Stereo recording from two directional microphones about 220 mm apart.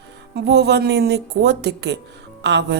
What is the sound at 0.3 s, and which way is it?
A woman's voice, 50° right (ahead or behind).